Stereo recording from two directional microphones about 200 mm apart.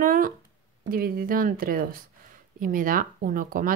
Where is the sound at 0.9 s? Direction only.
45° right (ahead or behind).